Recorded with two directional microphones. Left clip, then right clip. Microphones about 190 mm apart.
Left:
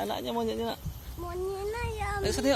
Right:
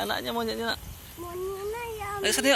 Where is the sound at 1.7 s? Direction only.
15° left (ahead or behind).